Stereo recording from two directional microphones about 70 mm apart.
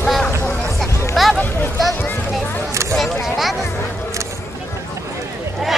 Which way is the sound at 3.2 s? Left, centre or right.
Centre.